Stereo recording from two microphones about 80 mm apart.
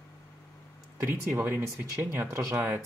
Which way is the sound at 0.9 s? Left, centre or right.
Right.